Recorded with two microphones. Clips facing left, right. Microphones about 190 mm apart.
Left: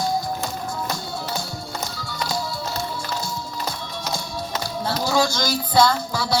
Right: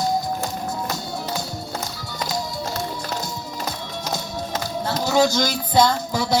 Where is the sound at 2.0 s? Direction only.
20° right (ahead or behind).